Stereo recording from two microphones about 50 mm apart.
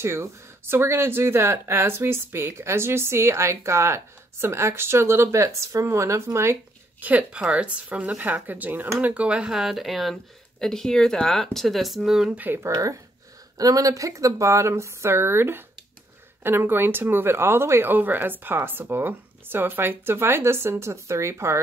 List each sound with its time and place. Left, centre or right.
0.0 s speech: right
7.0 s speech: right
9.5 s speech: centre
10.6 s speech: centre
12.5 s speech: right
13.9 s speech: right
17.8 s speech: right